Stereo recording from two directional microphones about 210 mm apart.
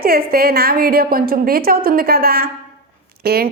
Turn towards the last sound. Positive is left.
turn(degrees=-45)  # may be behind; listen again after turning